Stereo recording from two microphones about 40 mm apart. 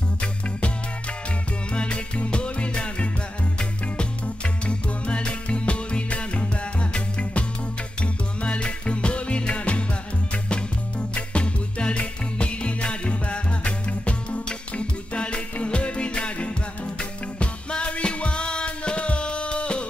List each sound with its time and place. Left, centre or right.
1.7 s music: left
4.6 s music: left